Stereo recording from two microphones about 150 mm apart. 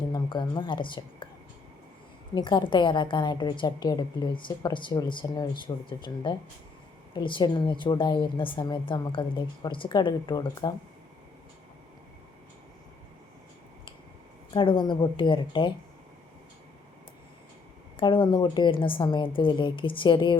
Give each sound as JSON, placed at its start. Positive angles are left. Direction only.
{"t": 0.1, "sound": "speech", "side_deg": 30}
{"t": 2.3, "sound": "a woman's voice", "side_deg": 30}
{"t": 14.5, "sound": "a woman's voice", "side_deg": 35}
{"t": 17.9, "sound": "a woman's voice", "side_deg": 35}